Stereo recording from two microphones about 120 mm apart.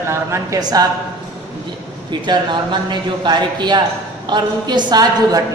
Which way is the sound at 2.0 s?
40° right (ahead or behind).